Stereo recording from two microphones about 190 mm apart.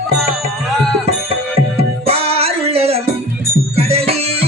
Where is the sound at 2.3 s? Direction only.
30° right (ahead or behind).